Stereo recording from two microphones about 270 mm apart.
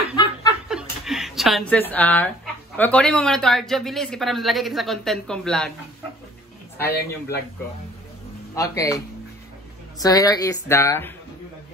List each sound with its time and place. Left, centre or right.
0.1 s snicker: centre
0.7 s speech: centre
6.9 s a man's voice: left
8.5 s speech: centre